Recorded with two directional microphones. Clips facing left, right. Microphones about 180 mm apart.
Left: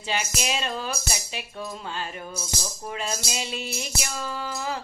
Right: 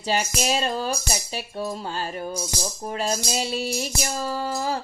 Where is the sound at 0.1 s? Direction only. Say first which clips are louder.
Right 5 dB; 40° right (ahead or behind).